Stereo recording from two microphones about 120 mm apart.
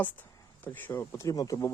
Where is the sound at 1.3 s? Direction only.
30° left (ahead or behind).